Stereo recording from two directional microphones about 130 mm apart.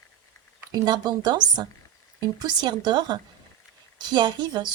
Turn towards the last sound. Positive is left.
turn(degrees=-35)  # may be behind; listen again after turning